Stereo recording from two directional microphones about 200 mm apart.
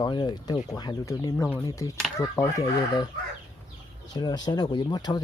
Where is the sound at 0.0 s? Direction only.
20° left (ahead or behind).